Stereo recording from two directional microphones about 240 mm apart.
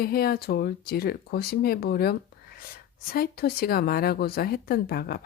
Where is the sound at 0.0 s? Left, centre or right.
Left.